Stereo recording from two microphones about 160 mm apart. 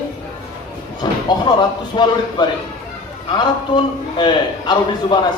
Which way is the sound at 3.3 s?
30° left (ahead or behind).